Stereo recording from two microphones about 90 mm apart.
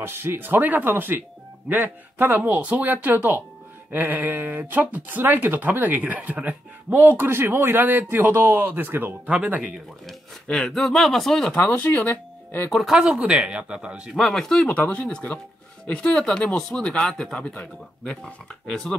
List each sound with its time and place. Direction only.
0.0 s speech: 25° right (ahead or behind)
9.6 s a man's voice: 5° left (ahead or behind)
11.5 s speech: 20° left (ahead or behind)
12.7 s speech: 5° right (ahead or behind)
14.1 s a man's voice: centre (ahead or behind)